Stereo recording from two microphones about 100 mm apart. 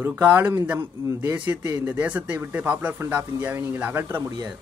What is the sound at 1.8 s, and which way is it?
Speech, 15° right (ahead or behind).